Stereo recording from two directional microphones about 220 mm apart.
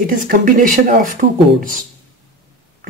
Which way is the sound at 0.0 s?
40° right (ahead or behind).